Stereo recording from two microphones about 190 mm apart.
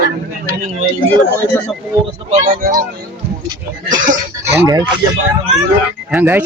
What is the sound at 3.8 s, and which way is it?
Speech, 45° right (ahead or behind).